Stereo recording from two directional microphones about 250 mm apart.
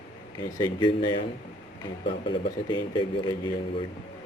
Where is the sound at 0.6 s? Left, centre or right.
Centre.